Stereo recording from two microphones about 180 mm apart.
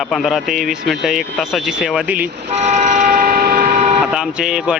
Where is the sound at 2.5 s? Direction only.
40° right (ahead or behind).